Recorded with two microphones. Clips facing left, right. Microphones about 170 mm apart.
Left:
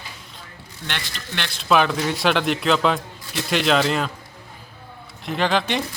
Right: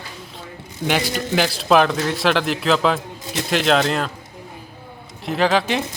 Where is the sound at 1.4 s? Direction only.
5° right (ahead or behind).